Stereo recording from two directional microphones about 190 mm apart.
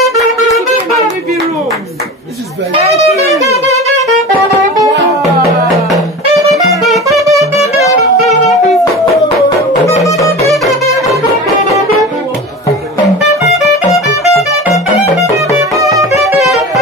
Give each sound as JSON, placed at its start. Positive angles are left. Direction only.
{"t": 2.7, "sound": "music", "side_deg": -35}
{"t": 7.2, "sound": "music", "side_deg": -15}
{"t": 8.3, "sound": "music", "side_deg": 0}
{"t": 9.8, "sound": "music", "side_deg": 15}
{"t": 10.5, "sound": "music", "side_deg": 0}
{"t": 15.3, "sound": "music", "side_deg": -15}